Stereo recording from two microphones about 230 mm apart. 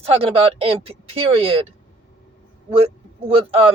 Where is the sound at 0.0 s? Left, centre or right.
Right.